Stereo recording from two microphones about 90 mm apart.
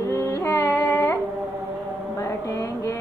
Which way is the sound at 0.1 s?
30° left (ahead or behind).